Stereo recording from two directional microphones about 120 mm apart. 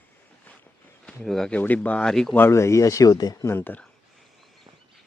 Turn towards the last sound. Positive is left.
turn(degrees=15)  # may be behind; listen again after turning